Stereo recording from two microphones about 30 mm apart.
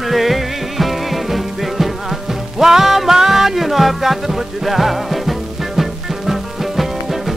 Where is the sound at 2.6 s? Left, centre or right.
Centre.